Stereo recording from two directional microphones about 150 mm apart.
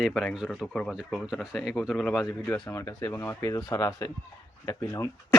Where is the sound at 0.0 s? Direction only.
5° left (ahead or behind).